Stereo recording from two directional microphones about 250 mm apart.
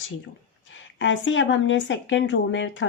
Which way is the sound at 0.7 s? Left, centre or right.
Left.